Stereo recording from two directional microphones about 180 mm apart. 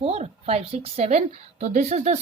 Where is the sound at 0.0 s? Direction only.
35° right (ahead or behind).